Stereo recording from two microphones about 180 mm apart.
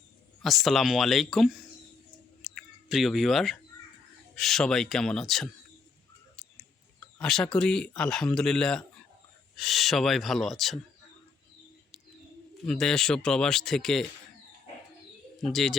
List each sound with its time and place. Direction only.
0.4 s speech: centre (ahead or behind)
2.4 s a sound: centre (ahead or behind)
4.4 s speech: centre (ahead or behind)
7.2 s speech: 5° left (ahead or behind)
12.6 s speech: 5° left (ahead or behind)
15.4 s speech: centre (ahead or behind)